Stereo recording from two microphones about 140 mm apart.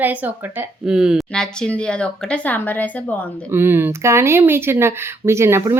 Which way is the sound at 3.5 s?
15° right (ahead or behind).